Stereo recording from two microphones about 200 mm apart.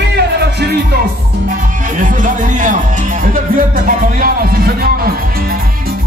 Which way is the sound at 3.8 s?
45° right (ahead or behind).